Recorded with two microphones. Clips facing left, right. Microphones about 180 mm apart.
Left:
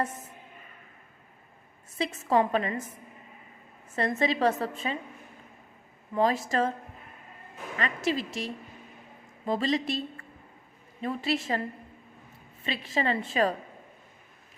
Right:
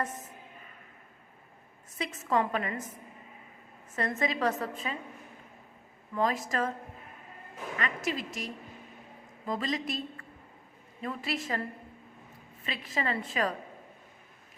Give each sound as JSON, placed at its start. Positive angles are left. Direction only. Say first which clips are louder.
{"t": 2.0, "sound": "a woman's voice", "louder": "left 4 dB", "side_deg": 30}
{"t": 3.9, "sound": "a woman's voice", "louder": "left 4 dB", "side_deg": 30}
{"t": 6.1, "sound": "a woman's voice", "louder": "left 4 dB", "side_deg": 30}
{"t": 7.8, "sound": "a woman's voice", "louder": "left 5 dB", "side_deg": 30}
{"t": 12.6, "sound": "a woman's voice", "louder": "left 4 dB", "side_deg": 30}